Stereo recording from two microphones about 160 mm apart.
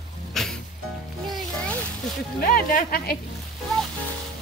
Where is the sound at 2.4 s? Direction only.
65° left (ahead or behind).